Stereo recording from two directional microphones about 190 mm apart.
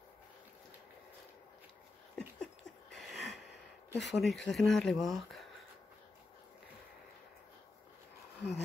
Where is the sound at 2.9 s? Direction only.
Centre (ahead or behind).